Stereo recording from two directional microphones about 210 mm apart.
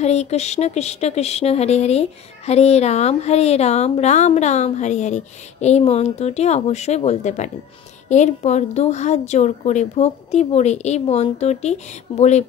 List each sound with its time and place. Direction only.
0.0 s speech: 30° left (ahead or behind)